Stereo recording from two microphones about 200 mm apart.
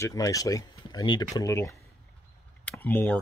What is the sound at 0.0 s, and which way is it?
Speech, 15° left (ahead or behind).